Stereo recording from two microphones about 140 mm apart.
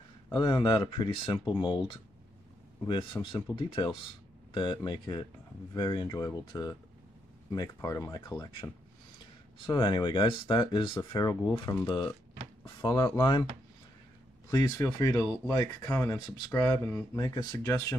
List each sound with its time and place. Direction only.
0.3 s speech: 30° left (ahead or behind)
9.7 s speech: 30° left (ahead or behind)
14.5 s speech: 25° left (ahead or behind)